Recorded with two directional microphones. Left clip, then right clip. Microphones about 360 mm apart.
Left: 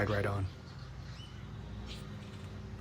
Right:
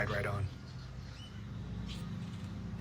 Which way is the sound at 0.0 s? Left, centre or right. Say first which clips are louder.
Left 2 dB; centre.